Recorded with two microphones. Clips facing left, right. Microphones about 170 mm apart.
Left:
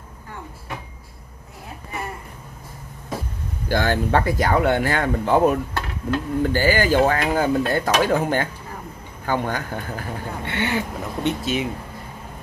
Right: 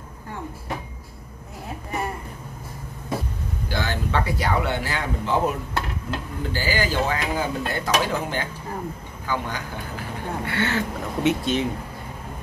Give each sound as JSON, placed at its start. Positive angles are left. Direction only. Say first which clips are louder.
{"t": 3.6, "sound": "speech", "louder": "left 7 dB", "side_deg": 50}
{"t": 10.4, "sound": "speech", "louder": "left 1 dB", "side_deg": 20}